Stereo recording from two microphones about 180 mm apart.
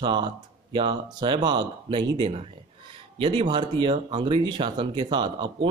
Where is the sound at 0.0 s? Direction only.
25° right (ahead or behind).